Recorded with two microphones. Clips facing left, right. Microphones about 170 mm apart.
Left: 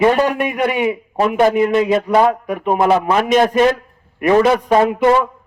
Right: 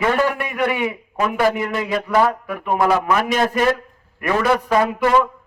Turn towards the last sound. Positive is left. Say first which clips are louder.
# left 4 dB
turn(degrees=25)  # may be behind; listen again after turning